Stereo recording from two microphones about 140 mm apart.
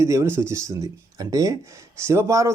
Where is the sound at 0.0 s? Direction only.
20° right (ahead or behind).